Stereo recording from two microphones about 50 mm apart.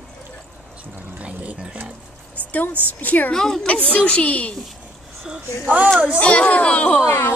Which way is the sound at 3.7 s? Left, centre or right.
Left.